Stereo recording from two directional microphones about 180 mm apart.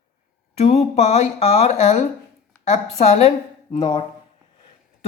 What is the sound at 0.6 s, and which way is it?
A woman's voice, 35° left (ahead or behind).